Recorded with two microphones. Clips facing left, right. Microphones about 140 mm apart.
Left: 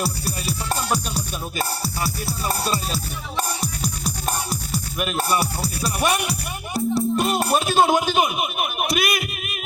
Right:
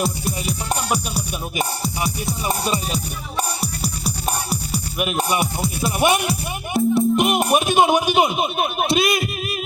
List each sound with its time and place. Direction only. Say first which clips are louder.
0.0 s music: right 3 dB; 20° right (ahead or behind)
6.7 s speech: right 4 dB; 20° right (ahead or behind)